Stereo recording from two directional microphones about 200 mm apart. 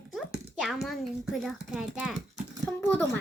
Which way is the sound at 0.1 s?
Centre (ahead or behind).